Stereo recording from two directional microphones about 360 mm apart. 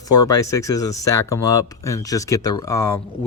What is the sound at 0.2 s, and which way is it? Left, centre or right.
Speech, centre.